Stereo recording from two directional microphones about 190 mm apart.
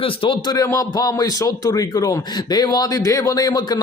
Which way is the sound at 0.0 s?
25° left (ahead or behind).